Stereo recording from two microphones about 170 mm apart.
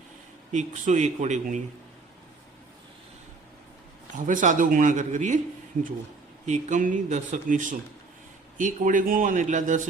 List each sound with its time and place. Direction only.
0.5 s speech: 45° right (ahead or behind)
4.1 s speech: 50° right (ahead or behind)
6.4 s speech: 45° right (ahead or behind)